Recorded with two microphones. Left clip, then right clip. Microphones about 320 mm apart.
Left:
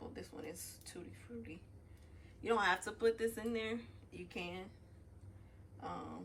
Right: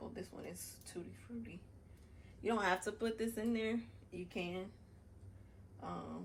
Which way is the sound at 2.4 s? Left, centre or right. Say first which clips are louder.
Left 2 dB; centre.